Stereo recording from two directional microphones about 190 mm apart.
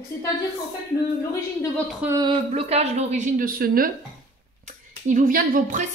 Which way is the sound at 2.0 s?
20° right (ahead or behind).